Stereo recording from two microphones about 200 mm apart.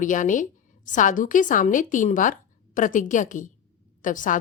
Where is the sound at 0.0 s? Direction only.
40° left (ahead or behind).